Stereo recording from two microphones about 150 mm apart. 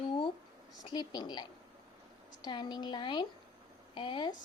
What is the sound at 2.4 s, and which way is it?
Speech, 30° left (ahead or behind).